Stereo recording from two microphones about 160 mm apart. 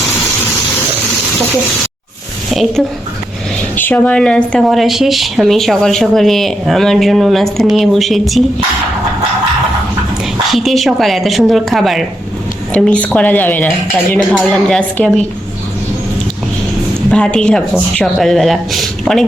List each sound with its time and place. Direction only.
2.5 s a woman's voice: centre (ahead or behind)
3.8 s speech: 10° left (ahead or behind)
10.5 s a woman's voice: centre (ahead or behind)
17.1 s speech: 5° left (ahead or behind)